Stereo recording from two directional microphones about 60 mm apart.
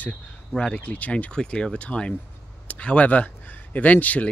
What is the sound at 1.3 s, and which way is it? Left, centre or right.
Speech, centre.